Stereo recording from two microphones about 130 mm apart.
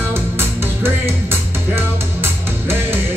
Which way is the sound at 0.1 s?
15° right (ahead or behind).